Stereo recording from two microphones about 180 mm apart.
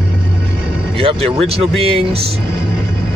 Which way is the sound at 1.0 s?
30° right (ahead or behind).